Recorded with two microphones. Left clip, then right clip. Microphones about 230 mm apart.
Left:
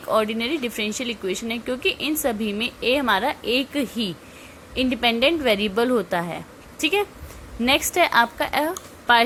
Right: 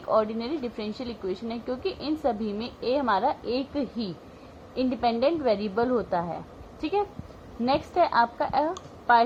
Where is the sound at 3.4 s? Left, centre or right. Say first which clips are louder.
Left 6 dB; left.